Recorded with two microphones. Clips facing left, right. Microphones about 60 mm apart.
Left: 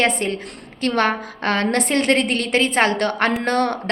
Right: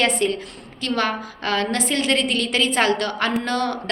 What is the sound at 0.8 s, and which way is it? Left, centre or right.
A woman's voice, left.